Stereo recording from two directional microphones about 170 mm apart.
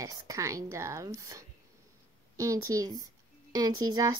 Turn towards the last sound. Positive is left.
turn(degrees=-20)  # may be behind; listen again after turning